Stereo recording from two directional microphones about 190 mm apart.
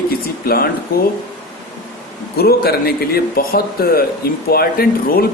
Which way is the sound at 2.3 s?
55° left (ahead or behind).